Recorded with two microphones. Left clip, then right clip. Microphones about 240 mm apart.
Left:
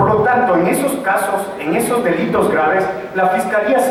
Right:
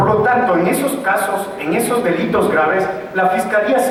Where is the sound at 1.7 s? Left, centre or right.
Centre.